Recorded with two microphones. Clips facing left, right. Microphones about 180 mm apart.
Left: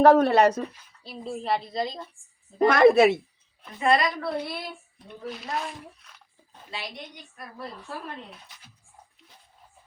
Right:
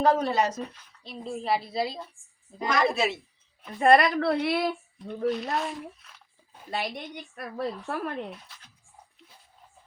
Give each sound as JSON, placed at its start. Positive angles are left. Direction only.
{"t": 0.0, "sound": "speech", "side_deg": 65}
{"t": 0.7, "sound": "speech", "side_deg": 5}
{"t": 2.6, "sound": "speech", "side_deg": 55}
{"t": 3.8, "sound": "speech", "side_deg": -55}
{"t": 5.3, "sound": "speech", "side_deg": 0}
{"t": 6.7, "sound": "a woman's voice", "side_deg": -55}